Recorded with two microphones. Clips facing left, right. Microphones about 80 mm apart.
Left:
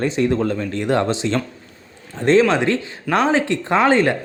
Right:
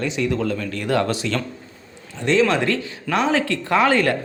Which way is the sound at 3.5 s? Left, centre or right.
Left.